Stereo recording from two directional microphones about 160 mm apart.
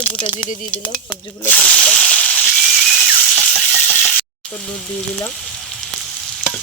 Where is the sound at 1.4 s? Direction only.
10° left (ahead or behind).